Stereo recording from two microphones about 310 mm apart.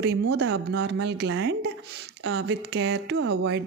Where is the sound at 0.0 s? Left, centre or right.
Right.